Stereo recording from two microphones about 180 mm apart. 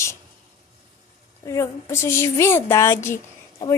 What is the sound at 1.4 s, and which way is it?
Speech, 15° left (ahead or behind).